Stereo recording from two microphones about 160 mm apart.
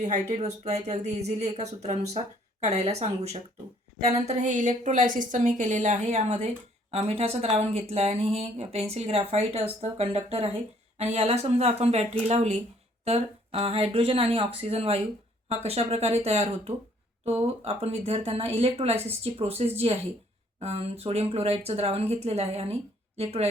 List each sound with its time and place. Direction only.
0.0 s speech: 45° right (ahead or behind)